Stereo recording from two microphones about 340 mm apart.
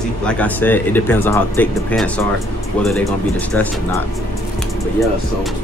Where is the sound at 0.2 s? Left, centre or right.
Centre.